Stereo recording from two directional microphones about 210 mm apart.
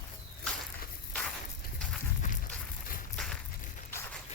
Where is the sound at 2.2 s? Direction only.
35° left (ahead or behind).